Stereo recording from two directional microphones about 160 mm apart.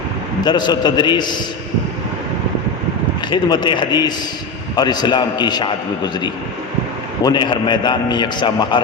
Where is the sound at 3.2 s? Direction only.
30° left (ahead or behind).